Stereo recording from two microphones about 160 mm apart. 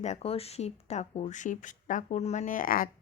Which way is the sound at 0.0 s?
40° left (ahead or behind).